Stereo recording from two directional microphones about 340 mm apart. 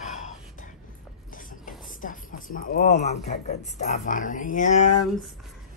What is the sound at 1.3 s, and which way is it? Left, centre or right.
Speech, left.